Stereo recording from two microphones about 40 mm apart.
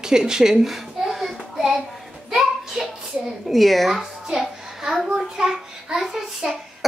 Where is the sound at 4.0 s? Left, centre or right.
Centre.